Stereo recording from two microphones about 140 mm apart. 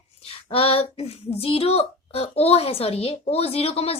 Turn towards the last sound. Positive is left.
turn(degrees=45)  # may be behind; listen again after turning